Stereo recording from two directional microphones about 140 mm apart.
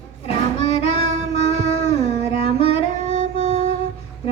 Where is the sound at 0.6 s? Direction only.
45° left (ahead or behind).